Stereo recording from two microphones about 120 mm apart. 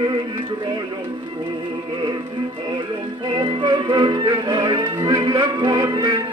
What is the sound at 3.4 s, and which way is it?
Music, 40° right (ahead or behind).